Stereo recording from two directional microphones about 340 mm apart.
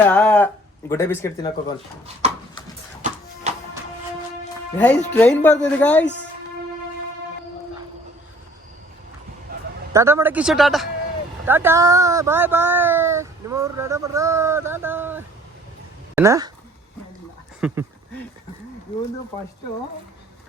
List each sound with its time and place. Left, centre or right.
0.0 s speech: centre
3.5 s music: centre
4.8 s speech: centre
9.9 s speech: centre
17.6 s speech: centre